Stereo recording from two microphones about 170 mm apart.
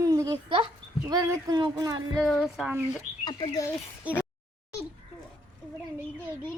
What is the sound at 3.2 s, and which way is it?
Speech, 25° left (ahead or behind).